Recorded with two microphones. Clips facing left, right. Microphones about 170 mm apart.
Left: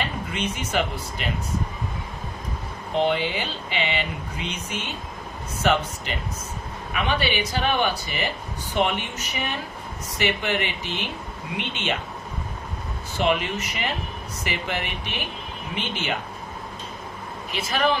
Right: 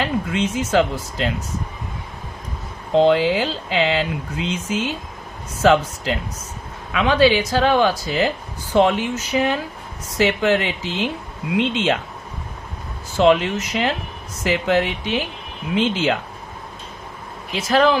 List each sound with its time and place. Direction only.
0.0 s speech: 90° right
2.9 s speech: 90° right
13.1 s speech: 90° right
17.6 s speech: 90° right